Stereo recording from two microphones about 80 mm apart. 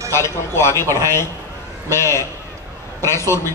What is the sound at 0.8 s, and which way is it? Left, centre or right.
Speech, right.